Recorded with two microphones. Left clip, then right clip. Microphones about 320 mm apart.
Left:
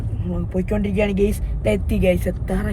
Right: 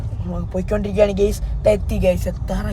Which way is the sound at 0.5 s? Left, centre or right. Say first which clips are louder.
Right 2 dB; right.